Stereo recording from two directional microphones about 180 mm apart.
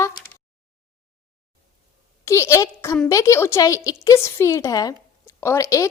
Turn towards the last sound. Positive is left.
turn(degrees=15)  # may be behind; listen again after turning